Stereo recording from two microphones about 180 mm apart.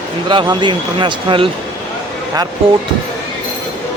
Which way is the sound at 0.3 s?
25° right (ahead or behind).